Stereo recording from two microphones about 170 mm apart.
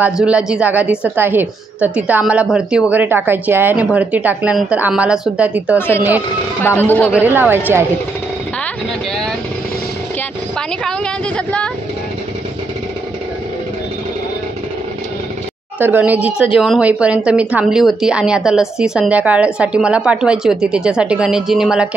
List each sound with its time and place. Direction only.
0.0 s a woman's voice: 5° right (ahead or behind)
6.6 s a man's voice: 10° left (ahead or behind)
7.2 s a woman's voice: 10° right (ahead or behind)
10.8 s a sound: 5° left (ahead or behind)
15.8 s a woman's voice: 10° right (ahead or behind)